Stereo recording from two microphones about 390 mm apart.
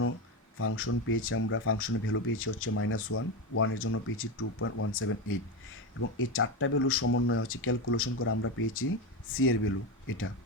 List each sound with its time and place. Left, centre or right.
0.6 s speech: left